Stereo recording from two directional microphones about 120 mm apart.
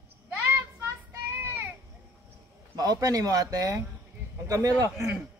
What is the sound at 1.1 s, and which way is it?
Child singing, 20° right (ahead or behind).